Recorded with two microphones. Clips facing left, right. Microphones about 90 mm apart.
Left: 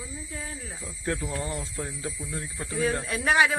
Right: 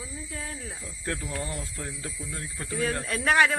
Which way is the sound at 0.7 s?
20° left (ahead or behind).